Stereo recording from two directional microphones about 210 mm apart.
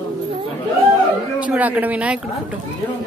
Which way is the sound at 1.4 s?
5° right (ahead or behind).